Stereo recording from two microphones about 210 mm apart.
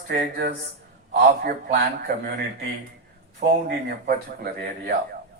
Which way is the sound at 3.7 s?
50° right (ahead or behind).